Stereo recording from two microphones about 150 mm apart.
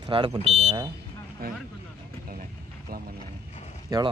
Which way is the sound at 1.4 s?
90° right.